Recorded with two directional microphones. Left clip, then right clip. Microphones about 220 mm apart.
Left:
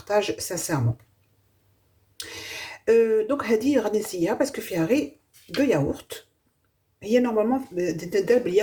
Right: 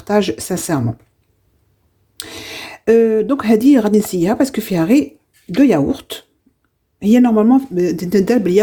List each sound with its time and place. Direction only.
0.0 s speech: 45° right (ahead or behind)
2.1 s speech: 45° right (ahead or behind)